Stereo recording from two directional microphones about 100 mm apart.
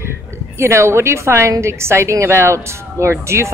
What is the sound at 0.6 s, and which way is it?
A woman's voice, 25° right (ahead or behind).